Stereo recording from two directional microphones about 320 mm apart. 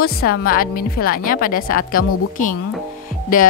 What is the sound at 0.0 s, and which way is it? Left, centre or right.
A woman's voice, left.